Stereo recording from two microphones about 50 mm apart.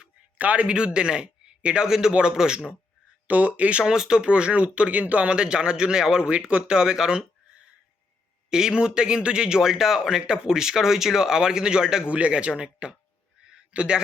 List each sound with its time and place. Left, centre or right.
0.3 s a man's voice: right
0.9 s a man's voice: centre
3.2 s speech: right
3.8 s a man's voice: centre
8.4 s a man's voice: centre